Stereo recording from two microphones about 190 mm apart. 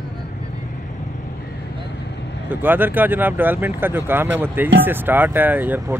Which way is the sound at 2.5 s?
10° right (ahead or behind).